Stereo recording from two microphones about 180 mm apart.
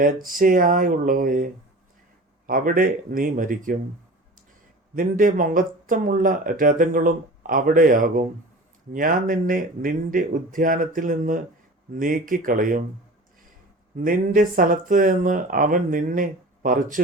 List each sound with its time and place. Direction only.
0.3 s speech: 50° right (ahead or behind)
2.5 s speech: 50° right (ahead or behind)
4.9 s speech: 50° right (ahead or behind)
14.0 s speech: 50° right (ahead or behind)